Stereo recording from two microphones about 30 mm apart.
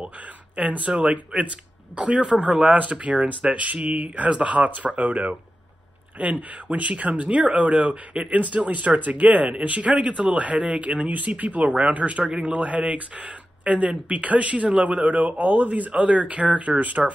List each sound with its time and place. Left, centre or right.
0.6 s speech: right
2.0 s speech: right
2.8 s speech: right
4.3 s speech: right
4.6 s a man's voice: right
16.0 s speech: right